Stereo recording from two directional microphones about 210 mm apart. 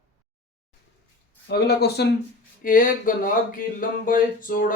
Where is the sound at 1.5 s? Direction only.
50° left (ahead or behind).